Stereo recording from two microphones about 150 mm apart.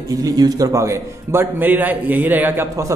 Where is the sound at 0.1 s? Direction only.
25° right (ahead or behind).